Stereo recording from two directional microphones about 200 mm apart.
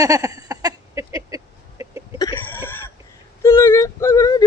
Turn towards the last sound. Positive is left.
turn(degrees=15)  # may be behind; listen again after turning